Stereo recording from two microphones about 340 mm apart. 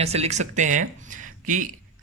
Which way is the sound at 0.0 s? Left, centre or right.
Centre.